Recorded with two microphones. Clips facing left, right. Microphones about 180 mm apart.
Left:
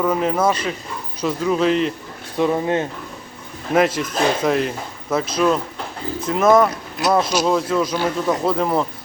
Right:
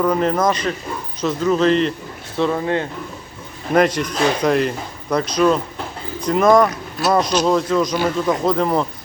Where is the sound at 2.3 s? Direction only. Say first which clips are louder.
Left 1 dB; 15° left (ahead or behind).